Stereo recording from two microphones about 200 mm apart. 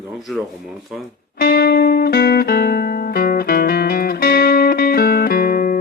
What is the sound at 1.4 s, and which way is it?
Music, 50° left (ahead or behind).